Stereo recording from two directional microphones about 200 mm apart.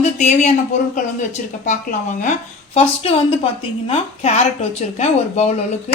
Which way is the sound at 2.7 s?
30° left (ahead or behind).